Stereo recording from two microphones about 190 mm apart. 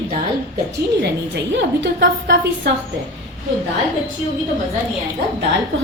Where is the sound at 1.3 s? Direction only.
65° right (ahead or behind).